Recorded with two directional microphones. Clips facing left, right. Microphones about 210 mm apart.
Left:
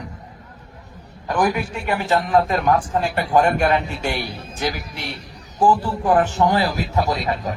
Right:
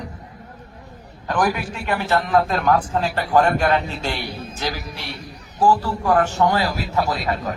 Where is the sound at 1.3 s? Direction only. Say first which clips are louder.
Left 1 dB; 10° left (ahead or behind).